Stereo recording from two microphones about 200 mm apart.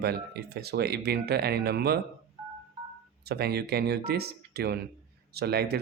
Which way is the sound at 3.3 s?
55° right (ahead or behind).